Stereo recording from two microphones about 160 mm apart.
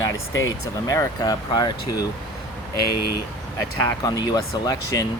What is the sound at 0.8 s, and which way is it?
Speech, 20° left (ahead or behind).